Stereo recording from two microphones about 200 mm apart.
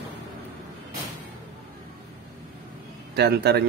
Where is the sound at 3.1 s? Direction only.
55° right (ahead or behind).